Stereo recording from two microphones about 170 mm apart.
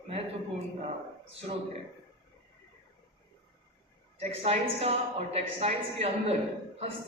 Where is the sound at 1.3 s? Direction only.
40° right (ahead or behind).